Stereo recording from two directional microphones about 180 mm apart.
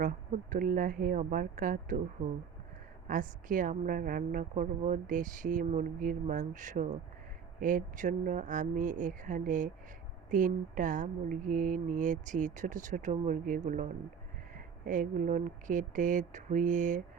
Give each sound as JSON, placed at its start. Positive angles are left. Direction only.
{"t": 0.5, "sound": "a woman's voice", "side_deg": -50}
{"t": 3.1, "sound": "a woman's voice", "side_deg": -50}